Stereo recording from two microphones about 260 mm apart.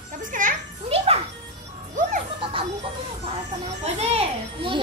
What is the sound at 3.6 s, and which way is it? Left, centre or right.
Children playing, right.